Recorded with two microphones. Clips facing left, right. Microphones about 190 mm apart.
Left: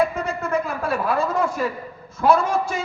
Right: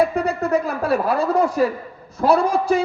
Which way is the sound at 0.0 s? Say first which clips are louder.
Right 4 dB; 35° right (ahead or behind).